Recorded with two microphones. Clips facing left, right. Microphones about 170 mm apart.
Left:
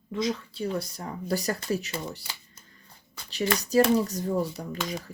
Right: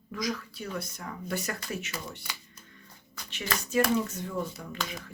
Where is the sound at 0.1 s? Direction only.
25° left (ahead or behind).